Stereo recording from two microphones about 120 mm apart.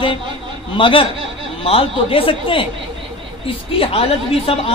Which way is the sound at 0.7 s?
45° left (ahead or behind).